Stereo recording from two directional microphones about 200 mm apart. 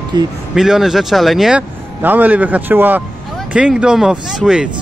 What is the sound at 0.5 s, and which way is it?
Speech, centre (ahead or behind).